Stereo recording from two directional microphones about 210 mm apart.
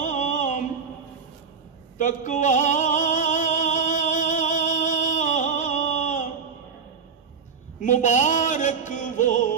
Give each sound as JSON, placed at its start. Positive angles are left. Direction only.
{"t": 0.0, "sound": "a sound", "side_deg": 35}
{"t": 2.0, "sound": "music", "side_deg": 35}
{"t": 7.8, "sound": "music", "side_deg": 35}